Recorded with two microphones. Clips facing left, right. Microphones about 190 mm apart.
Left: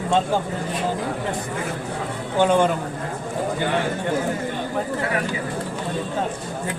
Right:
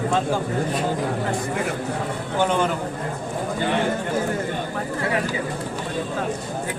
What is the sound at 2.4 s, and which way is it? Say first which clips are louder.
Speech: left 4 dB; 15° left (ahead or behind).